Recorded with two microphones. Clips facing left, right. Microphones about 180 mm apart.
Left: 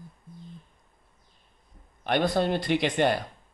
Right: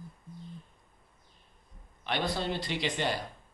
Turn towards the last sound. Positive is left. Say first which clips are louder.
# left 8 dB
turn(degrees=55)  # may be behind; listen again after turning